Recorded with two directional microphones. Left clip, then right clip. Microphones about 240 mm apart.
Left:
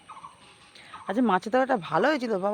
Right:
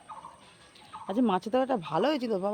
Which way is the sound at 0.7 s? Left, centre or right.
Centre.